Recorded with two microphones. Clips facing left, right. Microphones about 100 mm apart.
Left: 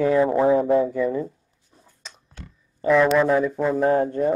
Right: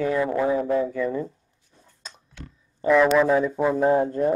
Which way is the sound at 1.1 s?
5° left (ahead or behind).